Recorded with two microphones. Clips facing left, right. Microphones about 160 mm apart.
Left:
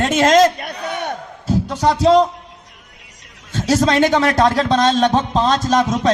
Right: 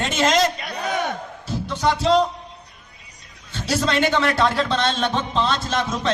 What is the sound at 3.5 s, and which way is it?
A man's voice, 45° left (ahead or behind).